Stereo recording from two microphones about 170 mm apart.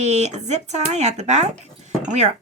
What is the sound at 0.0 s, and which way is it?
Speech, 40° right (ahead or behind).